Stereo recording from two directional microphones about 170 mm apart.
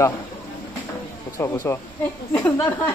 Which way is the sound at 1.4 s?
15° left (ahead or behind).